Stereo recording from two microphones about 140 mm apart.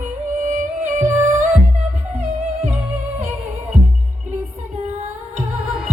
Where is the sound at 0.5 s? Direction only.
65° right (ahead or behind).